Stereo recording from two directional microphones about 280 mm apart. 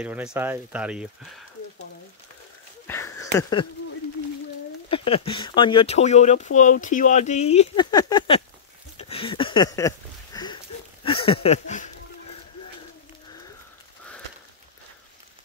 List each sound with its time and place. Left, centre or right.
0.0 s speech: centre
2.9 s a sound: centre
3.3 s speech: centre
4.8 s speech: centre
8.9 s a sound: centre
11.1 s speech: centre